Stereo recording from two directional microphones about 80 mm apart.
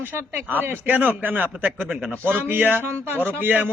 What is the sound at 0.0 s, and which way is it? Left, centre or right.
A man's voice, right.